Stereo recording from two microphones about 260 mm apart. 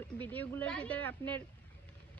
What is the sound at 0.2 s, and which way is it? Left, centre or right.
Speech, centre.